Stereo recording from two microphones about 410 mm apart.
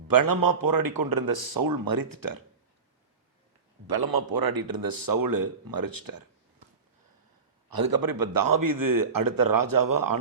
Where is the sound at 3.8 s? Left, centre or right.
Right.